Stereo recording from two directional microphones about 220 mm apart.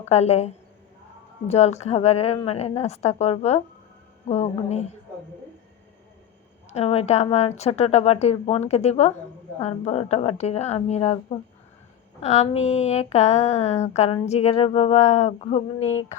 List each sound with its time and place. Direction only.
0.1 s speech: 30° left (ahead or behind)
6.7 s speech: 30° left (ahead or behind)